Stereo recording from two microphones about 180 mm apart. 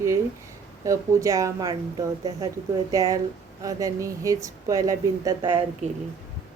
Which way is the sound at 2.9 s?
20° right (ahead or behind).